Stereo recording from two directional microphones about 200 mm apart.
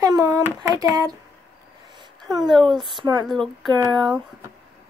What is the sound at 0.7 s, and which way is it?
Speech, 15° right (ahead or behind).